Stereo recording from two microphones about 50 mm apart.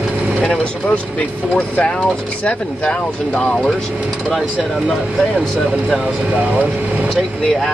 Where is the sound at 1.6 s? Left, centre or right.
Left.